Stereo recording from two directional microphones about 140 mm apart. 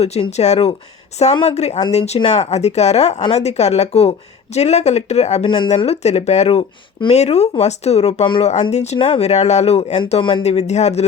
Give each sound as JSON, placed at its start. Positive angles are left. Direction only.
{"t": 0.0, "sound": "speech", "side_deg": 50}
{"t": 5.5, "sound": "speech", "side_deg": 30}
{"t": 5.7, "sound": "speech", "side_deg": 50}
{"t": 9.0, "sound": "speech", "side_deg": 40}
{"t": 10.1, "sound": "speech", "side_deg": 40}
{"t": 10.4, "sound": "speech", "side_deg": 50}